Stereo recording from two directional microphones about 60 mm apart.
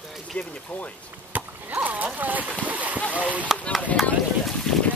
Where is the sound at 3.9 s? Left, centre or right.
Left.